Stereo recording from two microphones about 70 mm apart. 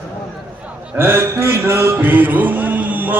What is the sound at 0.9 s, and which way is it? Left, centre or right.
Music, right.